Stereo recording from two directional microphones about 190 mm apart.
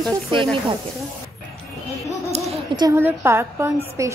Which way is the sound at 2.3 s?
25° right (ahead or behind).